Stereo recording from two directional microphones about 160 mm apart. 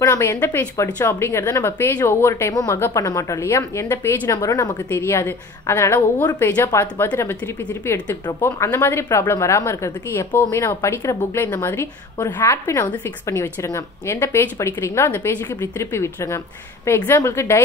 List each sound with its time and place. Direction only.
0.0 s a woman's voice: 15° left (ahead or behind)